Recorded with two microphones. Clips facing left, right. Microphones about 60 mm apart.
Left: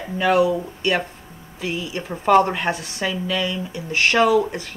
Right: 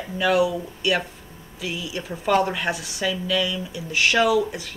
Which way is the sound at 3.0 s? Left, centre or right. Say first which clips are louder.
Even; left.